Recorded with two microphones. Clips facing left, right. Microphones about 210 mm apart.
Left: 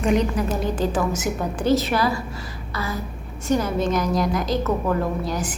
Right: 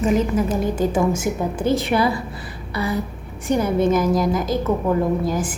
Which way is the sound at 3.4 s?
15° right (ahead or behind).